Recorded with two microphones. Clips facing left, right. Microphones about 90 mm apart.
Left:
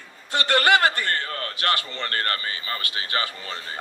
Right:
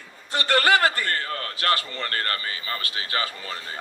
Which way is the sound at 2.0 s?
35° left (ahead or behind).